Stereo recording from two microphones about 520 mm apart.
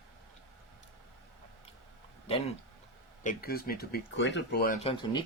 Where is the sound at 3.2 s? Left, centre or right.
Centre.